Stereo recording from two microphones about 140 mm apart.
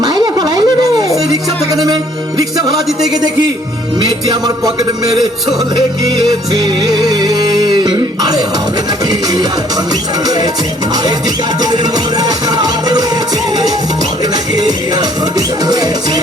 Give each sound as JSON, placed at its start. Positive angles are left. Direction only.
{"t": 0.0, "sound": "a sound", "side_deg": -30}
{"t": 4.3, "sound": "music", "side_deg": -30}
{"t": 11.6, "sound": "music", "side_deg": -30}
{"t": 15.4, "sound": "music", "side_deg": -30}